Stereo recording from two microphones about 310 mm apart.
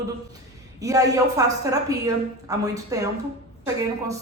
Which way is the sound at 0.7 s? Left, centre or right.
Centre.